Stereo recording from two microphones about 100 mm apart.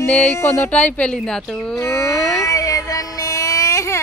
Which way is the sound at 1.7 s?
30° left (ahead or behind).